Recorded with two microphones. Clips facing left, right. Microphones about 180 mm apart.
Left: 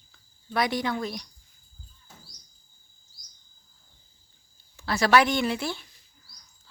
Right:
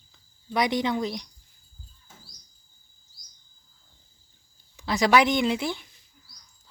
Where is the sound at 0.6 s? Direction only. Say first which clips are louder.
Right 2 dB; 20° right (ahead or behind).